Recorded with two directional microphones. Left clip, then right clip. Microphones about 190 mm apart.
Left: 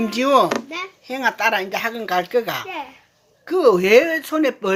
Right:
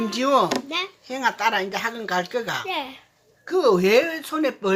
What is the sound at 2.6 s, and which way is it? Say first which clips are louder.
Speech: right 2 dB; 50° right (ahead or behind).